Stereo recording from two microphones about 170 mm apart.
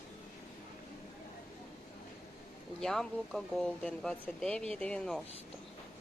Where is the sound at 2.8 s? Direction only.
5° left (ahead or behind).